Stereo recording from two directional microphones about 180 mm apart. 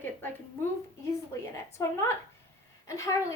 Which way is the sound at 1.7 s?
15° left (ahead or behind).